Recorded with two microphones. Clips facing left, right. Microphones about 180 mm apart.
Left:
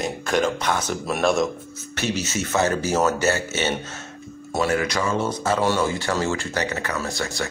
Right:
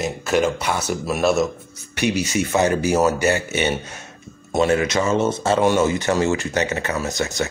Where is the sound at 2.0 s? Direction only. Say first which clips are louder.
Right 5 dB; 15° right (ahead or behind).